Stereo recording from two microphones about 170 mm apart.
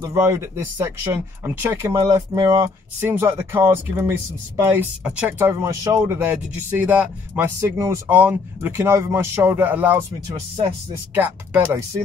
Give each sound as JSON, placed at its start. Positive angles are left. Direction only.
{"t": 0.1, "sound": "speech", "side_deg": -15}
{"t": 5.5, "sound": "speech", "side_deg": -20}
{"t": 11.1, "sound": "speech", "side_deg": -10}